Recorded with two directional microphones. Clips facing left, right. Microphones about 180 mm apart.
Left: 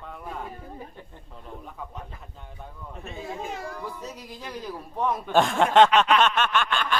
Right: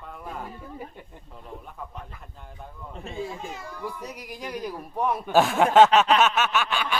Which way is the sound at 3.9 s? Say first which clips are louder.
Right 1 dB; 15° right (ahead or behind).